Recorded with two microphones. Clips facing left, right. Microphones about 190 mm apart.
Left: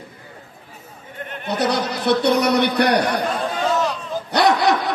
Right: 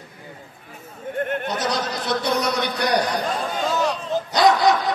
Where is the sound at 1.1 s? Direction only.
50° right (ahead or behind).